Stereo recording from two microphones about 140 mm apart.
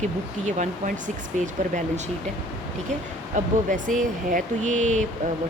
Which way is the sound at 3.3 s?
60° right (ahead or behind).